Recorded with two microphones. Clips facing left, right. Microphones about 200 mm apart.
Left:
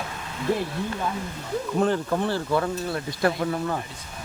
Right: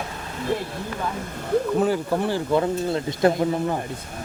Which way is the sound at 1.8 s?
10° right (ahead or behind).